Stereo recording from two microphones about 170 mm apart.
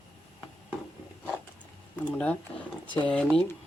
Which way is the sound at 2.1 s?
5° left (ahead or behind).